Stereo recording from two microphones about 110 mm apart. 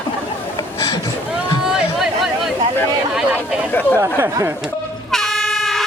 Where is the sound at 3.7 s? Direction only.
15° left (ahead or behind).